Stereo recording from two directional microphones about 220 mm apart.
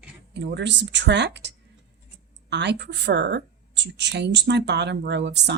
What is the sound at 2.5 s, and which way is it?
Speech, 50° right (ahead or behind).